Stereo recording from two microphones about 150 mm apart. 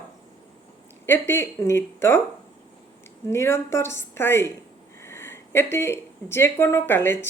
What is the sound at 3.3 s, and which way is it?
Speech, 15° left (ahead or behind).